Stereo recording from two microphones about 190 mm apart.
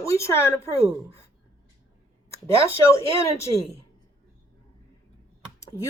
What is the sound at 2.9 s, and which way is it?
Speech, 15° left (ahead or behind).